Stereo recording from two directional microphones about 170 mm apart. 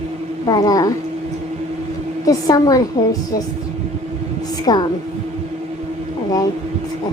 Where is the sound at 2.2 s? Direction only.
20° left (ahead or behind).